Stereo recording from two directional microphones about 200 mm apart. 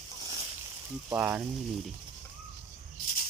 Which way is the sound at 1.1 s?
10° right (ahead or behind).